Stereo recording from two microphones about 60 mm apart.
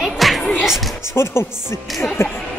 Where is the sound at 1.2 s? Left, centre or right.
Left.